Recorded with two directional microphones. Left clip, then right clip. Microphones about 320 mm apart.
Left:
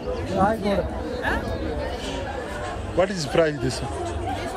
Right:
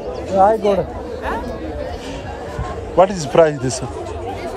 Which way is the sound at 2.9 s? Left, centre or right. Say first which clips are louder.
Right 9 dB; centre.